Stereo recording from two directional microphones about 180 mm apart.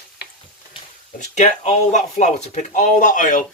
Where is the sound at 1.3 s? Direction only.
40° left (ahead or behind).